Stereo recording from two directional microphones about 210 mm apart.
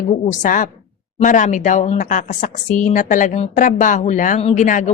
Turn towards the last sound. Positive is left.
turn(degrees=35)  # may be behind; listen again after turning